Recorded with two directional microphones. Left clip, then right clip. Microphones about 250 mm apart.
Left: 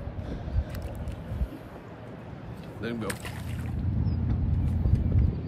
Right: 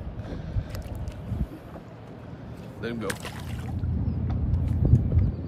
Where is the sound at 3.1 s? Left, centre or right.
Right.